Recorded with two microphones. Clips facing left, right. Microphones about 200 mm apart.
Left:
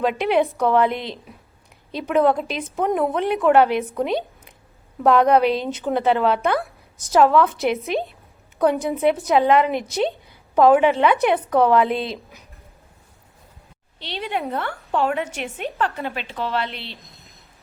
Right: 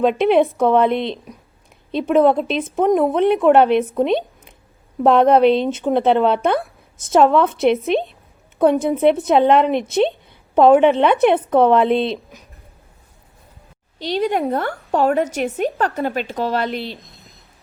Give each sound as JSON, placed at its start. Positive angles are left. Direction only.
{"t": 0.6, "sound": "a woman's voice", "side_deg": -20}
{"t": 8.5, "sound": "a woman's voice", "side_deg": -25}
{"t": 14.0, "sound": "a woman's voice", "side_deg": -40}